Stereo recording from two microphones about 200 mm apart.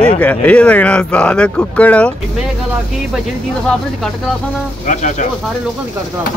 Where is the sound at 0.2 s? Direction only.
5° left (ahead or behind).